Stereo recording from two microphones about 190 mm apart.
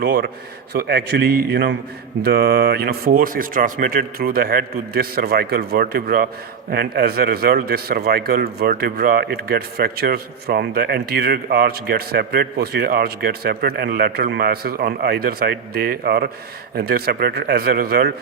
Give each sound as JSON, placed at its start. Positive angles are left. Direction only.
{"t": 0.0, "sound": "a man's voice", "side_deg": -55}